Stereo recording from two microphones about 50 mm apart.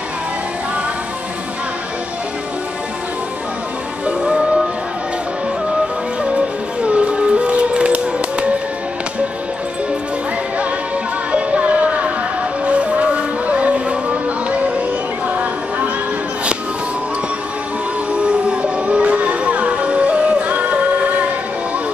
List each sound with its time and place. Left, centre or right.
4.2 s music: centre
6.8 s music: right
11.3 s music: right
18.5 s music: right